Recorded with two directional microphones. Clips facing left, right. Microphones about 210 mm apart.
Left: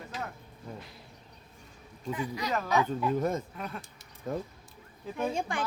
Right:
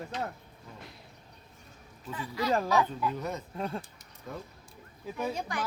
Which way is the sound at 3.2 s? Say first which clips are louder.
Left 6 dB; 50° left (ahead or behind).